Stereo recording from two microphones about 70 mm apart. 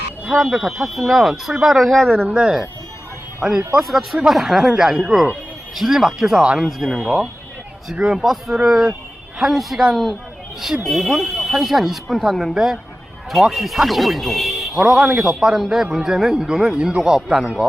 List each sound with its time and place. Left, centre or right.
0.3 s speech: centre
2.2 s speech: centre
3.4 s speech: centre